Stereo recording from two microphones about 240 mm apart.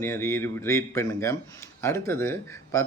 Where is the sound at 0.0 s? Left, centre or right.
Centre.